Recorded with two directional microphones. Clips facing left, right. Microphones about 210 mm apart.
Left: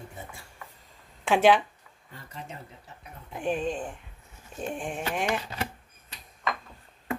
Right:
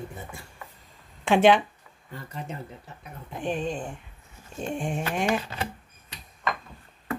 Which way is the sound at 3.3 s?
5° left (ahead or behind).